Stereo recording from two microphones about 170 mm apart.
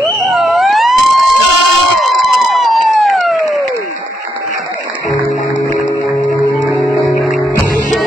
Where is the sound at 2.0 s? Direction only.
Centre (ahead or behind).